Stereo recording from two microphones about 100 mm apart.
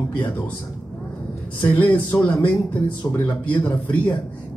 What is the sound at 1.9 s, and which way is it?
Speech, 15° left (ahead or behind).